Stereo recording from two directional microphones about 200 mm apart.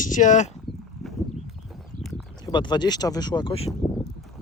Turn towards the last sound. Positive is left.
turn(degrees=25)  # may be behind; listen again after turning